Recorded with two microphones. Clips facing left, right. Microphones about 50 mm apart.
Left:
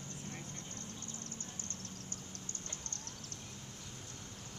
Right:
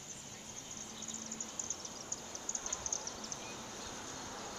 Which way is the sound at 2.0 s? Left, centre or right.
Right.